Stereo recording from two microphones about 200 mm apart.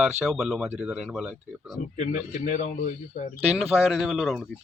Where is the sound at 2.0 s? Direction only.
40° left (ahead or behind).